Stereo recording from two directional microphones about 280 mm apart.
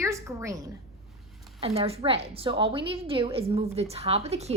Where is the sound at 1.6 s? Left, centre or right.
Right.